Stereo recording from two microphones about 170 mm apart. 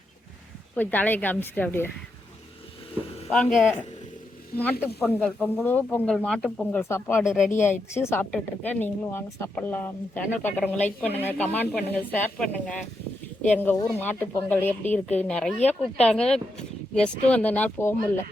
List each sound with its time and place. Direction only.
0.8 s speech: 10° left (ahead or behind)
3.3 s speech: 10° left (ahead or behind)
7.3 s speech: centre (ahead or behind)
7.5 s speech: 45° left (ahead or behind)
7.9 s speech: 15° left (ahead or behind)